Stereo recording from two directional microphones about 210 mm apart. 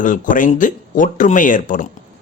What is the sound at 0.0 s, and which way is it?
A man's voice, 40° left (ahead or behind).